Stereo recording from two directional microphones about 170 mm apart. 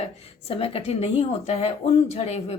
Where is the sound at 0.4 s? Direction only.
35° left (ahead or behind).